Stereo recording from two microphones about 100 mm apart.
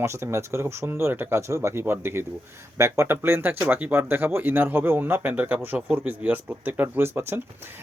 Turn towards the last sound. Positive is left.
turn(degrees=-20)  # may be behind; listen again after turning